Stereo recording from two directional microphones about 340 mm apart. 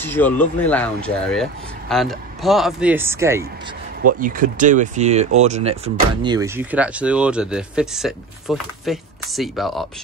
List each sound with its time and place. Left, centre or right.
0.0 s speech: centre
4.2 s speech: right; by 9.8 s centre